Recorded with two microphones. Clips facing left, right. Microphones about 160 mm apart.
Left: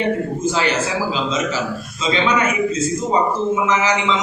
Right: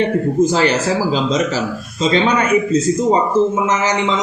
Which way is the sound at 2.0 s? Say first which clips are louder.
Right 4 dB; 40° right (ahead or behind).